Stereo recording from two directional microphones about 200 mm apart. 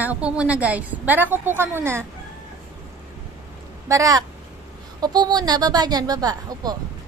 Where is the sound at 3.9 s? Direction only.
15° right (ahead or behind).